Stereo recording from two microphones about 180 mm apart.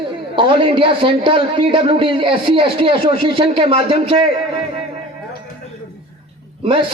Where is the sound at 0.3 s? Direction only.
30° right (ahead or behind).